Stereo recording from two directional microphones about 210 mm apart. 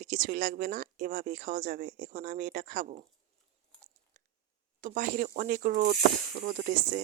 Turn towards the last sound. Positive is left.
turn(degrees=-40)  # may be behind; listen again after turning